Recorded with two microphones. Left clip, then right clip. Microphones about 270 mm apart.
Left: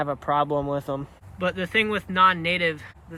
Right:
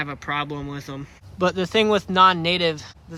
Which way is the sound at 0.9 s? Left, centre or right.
Centre.